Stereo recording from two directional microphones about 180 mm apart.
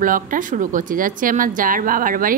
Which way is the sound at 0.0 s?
50° right (ahead or behind).